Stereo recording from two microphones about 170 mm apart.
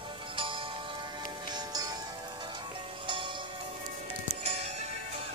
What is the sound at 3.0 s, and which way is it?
Music, 30° right (ahead or behind).